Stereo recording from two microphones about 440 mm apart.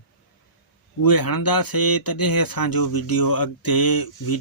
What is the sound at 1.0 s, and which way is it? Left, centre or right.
Speech, left.